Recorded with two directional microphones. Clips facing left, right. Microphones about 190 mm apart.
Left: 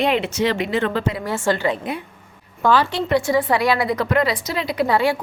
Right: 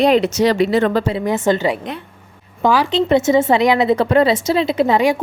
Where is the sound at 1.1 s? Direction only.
20° right (ahead or behind).